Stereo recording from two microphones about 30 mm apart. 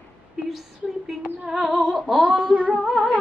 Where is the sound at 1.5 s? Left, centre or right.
Centre.